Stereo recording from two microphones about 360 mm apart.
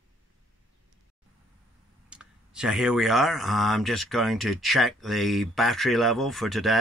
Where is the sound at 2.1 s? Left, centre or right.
Centre.